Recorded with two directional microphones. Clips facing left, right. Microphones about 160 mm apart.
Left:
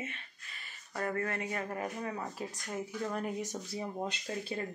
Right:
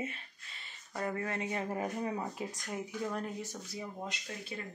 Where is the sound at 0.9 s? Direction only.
15° right (ahead or behind).